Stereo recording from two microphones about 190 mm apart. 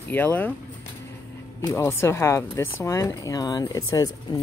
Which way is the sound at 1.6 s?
15° left (ahead or behind).